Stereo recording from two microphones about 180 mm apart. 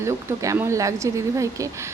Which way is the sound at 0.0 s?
15° right (ahead or behind).